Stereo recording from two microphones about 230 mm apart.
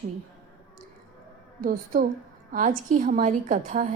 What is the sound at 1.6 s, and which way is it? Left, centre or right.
A woman's voice, right.